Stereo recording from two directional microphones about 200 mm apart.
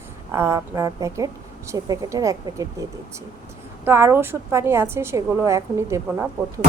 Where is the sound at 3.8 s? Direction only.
10° right (ahead or behind).